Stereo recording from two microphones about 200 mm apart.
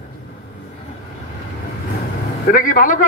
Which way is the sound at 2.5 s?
45° left (ahead or behind).